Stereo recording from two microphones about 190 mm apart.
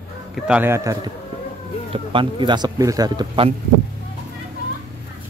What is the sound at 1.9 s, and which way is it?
Speech, 25° right (ahead or behind).